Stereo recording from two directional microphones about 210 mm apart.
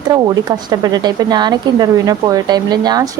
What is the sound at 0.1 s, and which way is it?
Speech, 20° right (ahead or behind).